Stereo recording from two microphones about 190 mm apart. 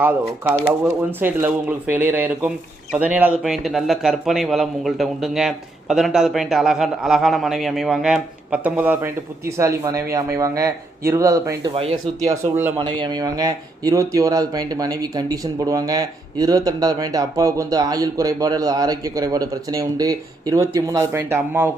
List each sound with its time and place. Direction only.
0.0 s a man's voice: 10° right (ahead or behind)
11.7 s speech: 30° right (ahead or behind)
12.2 s speech: 10° right (ahead or behind)
12.8 s speech: 25° right (ahead or behind)